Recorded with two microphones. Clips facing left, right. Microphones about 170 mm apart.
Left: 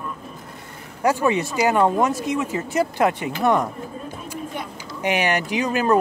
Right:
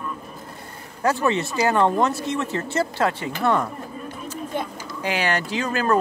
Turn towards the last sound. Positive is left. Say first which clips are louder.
# left 2 dB
turn(degrees=15)  # may be behind; listen again after turning